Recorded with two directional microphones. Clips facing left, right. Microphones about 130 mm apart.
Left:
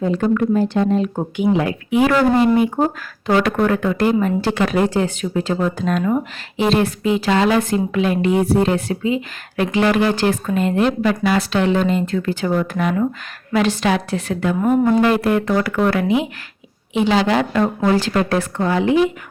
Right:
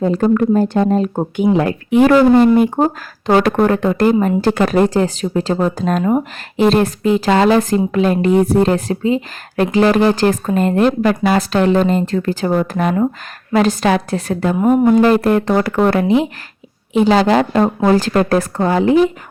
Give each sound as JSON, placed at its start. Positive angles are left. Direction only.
{"t": 0.0, "sound": "speech", "side_deg": -40}
{"t": 2.7, "sound": "speech", "side_deg": -30}